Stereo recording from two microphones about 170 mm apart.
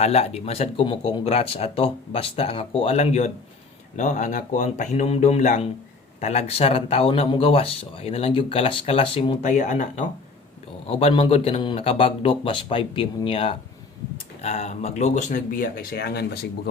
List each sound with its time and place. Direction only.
0.0 s speech: 40° left (ahead or behind)
9.5 s speech: 50° left (ahead or behind)
10.8 s speech: 35° left (ahead or behind)
14.4 s speech: 40° left (ahead or behind); by 16.5 s 70° left (ahead or behind)